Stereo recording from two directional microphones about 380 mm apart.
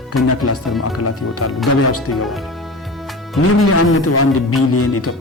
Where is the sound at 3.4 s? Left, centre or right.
Left.